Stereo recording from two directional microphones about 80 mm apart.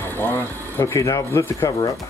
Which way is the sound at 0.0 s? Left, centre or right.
Left.